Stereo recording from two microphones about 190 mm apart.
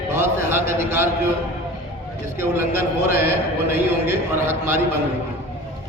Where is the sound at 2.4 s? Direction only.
10° right (ahead or behind).